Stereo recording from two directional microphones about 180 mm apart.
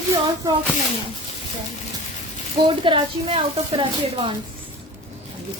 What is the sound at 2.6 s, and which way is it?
A woman's voice, 30° right (ahead or behind).